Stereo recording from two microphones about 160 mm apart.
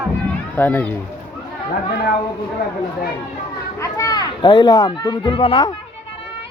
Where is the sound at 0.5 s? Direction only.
10° left (ahead or behind).